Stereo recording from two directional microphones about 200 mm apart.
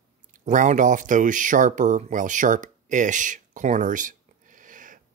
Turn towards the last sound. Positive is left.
turn(degrees=-40)  # may be behind; listen again after turning